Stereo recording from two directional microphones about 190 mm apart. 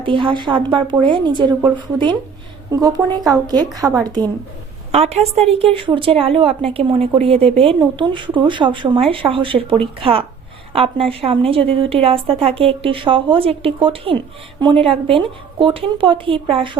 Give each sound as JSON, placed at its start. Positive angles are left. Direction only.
{"t": 0.0, "sound": "a woman's voice", "side_deg": -25}
{"t": 3.8, "sound": "a woman's voice", "side_deg": -5}
{"t": 4.9, "sound": "a woman's voice", "side_deg": -35}